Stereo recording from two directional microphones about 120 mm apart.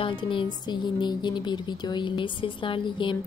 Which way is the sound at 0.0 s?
45° left (ahead or behind).